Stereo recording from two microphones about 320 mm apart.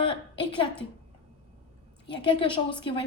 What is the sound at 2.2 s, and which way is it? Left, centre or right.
Speech, centre.